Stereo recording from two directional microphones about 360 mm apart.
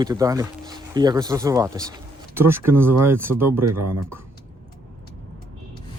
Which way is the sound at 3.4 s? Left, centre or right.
Right.